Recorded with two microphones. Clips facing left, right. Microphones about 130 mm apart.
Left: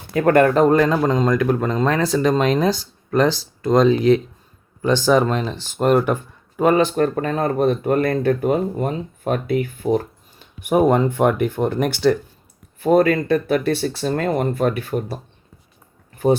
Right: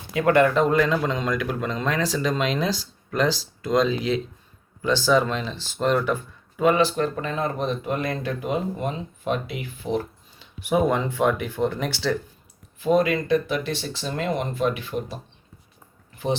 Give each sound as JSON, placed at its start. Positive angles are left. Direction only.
{"t": 0.1, "sound": "speech", "side_deg": 45}